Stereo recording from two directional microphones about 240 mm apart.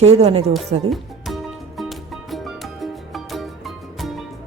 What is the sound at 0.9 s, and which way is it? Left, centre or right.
Music, centre.